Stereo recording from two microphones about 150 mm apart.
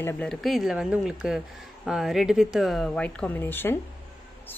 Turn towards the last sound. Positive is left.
turn(degrees=15)  # may be behind; listen again after turning